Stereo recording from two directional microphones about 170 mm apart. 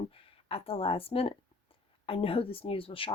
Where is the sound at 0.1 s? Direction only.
35° left (ahead or behind).